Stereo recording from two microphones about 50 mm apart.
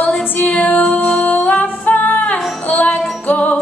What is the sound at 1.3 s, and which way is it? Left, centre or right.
Music, left.